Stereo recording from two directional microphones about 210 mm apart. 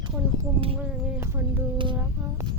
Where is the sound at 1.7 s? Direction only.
25° right (ahead or behind).